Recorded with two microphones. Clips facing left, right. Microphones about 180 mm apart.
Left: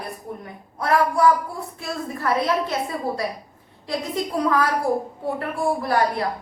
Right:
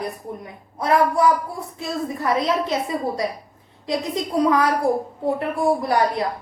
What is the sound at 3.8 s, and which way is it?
A woman's voice, 20° right (ahead or behind).